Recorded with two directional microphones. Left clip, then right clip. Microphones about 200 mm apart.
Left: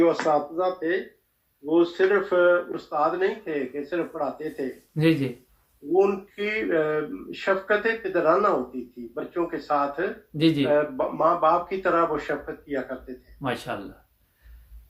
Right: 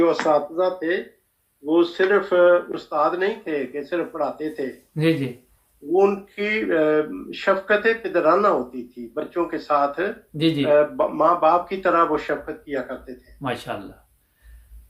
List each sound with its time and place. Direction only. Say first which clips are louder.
0.0 s speech: right 3 dB; 35° right (ahead or behind)
4.9 s speech: right 1 dB; 5° left (ahead or behind)
5.9 s speech: right 3 dB; 35° right (ahead or behind)
10.3 s speech: even; 5° left (ahead or behind)
10.7 s speech: right 5 dB; 35° right (ahead or behind)
13.4 s speech: right 2 dB; 5° left (ahead or behind)